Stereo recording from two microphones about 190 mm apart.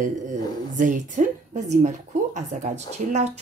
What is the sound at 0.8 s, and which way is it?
Speech, 40° right (ahead or behind).